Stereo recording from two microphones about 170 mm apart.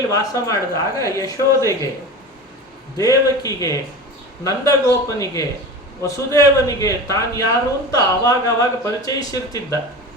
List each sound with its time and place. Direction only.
0.1 s speech: 20° left (ahead or behind)
3.0 s speech: 20° left (ahead or behind)